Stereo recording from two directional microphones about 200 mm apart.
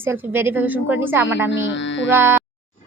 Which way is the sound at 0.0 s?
10° right (ahead or behind).